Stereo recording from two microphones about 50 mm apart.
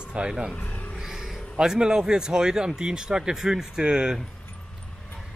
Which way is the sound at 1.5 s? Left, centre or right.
Centre.